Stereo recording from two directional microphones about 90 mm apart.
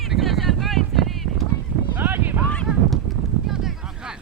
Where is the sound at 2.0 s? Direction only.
20° right (ahead or behind).